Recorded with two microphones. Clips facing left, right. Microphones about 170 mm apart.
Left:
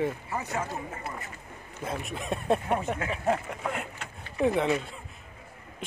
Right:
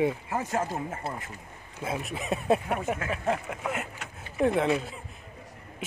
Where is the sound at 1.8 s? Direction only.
5° right (ahead or behind).